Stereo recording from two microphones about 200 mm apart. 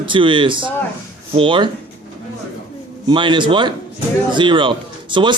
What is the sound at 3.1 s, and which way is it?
Speech, 25° right (ahead or behind).